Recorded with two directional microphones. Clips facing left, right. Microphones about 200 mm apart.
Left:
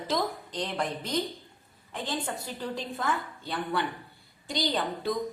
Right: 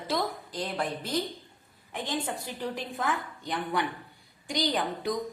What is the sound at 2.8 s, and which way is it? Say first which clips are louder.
A woman's voice: left 2 dB; 15° right (ahead or behind).